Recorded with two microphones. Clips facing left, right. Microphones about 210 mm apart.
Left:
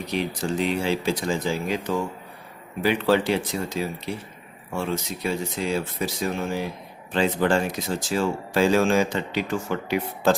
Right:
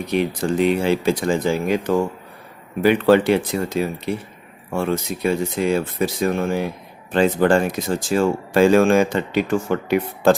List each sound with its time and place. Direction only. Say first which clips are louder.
0.1 s speech: right 6 dB; 55° right (ahead or behind)